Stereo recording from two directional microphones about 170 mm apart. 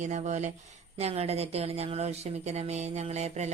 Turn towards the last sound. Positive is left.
turn(degrees=-40)  # may be behind; listen again after turning